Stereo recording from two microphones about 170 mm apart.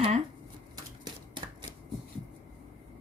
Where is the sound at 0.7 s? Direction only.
25° right (ahead or behind).